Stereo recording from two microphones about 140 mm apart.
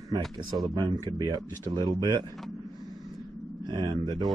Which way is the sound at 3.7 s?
30° right (ahead or behind).